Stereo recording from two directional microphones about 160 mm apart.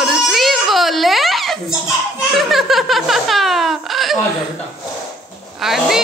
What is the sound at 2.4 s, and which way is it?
Speech, centre (ahead or behind).